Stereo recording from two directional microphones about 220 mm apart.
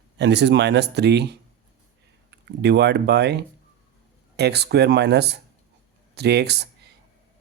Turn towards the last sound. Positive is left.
turn(degrees=-50)  # may be behind; listen again after turning